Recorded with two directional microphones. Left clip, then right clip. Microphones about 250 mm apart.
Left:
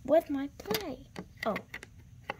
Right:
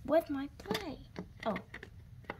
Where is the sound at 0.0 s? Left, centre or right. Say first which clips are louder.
Left 4 dB; centre.